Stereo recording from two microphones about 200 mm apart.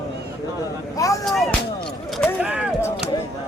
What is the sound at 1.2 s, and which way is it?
Music, centre (ahead or behind).